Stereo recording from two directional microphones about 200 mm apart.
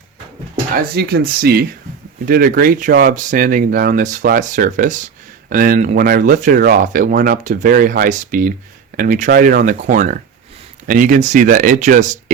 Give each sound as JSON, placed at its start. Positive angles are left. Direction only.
{"t": 0.9, "sound": "speech", "side_deg": -50}